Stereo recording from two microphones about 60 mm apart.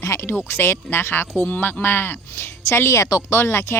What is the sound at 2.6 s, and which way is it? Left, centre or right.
Speech, left.